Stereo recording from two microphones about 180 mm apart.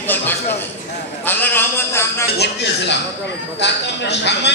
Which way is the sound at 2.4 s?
70° left (ahead or behind).